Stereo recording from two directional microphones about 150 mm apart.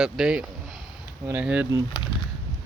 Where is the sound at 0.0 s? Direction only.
5° right (ahead or behind).